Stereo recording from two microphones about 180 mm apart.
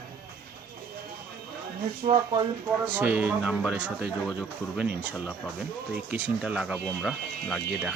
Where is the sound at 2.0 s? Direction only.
25° right (ahead or behind).